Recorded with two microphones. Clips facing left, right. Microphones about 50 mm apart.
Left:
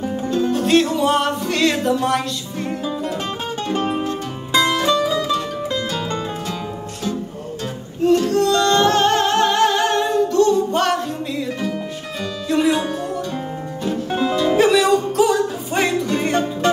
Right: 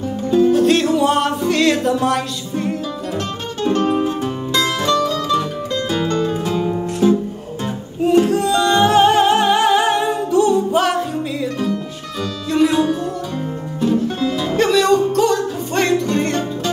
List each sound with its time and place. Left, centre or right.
0.3 s music: centre
3.7 s music: centre
6.5 s music: centre
12.4 s music: centre
14.5 s music: centre